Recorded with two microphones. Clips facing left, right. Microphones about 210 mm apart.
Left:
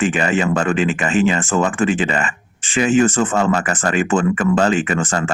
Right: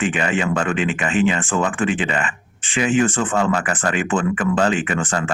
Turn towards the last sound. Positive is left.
turn(degrees=45)  # may be behind; listen again after turning